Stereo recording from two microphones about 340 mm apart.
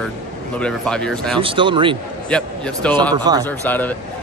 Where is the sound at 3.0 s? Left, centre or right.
Centre.